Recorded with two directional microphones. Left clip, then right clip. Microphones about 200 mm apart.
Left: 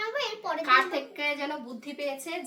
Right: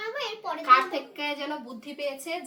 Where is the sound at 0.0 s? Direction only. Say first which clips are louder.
Left 1 dB; 15° left (ahead or behind).